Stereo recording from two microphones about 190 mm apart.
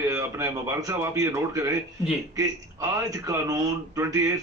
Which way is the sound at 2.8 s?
15° right (ahead or behind).